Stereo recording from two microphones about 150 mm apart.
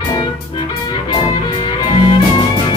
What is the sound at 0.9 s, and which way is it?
Music, 30° left (ahead or behind).